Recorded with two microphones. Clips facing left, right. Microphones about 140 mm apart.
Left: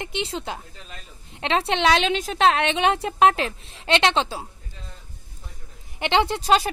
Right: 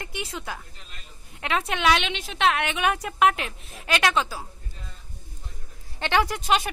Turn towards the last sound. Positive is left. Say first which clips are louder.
# left 3 dB
turn(degrees=35)  # may be behind; listen again after turning